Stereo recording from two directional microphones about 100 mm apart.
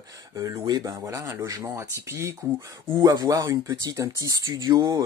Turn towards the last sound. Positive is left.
turn(degrees=-35)  # may be behind; listen again after turning